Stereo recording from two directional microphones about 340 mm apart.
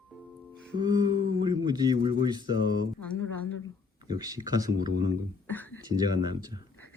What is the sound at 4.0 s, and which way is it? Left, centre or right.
Speech, centre.